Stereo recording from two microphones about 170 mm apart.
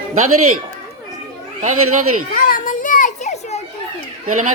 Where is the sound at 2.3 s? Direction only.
50° left (ahead or behind).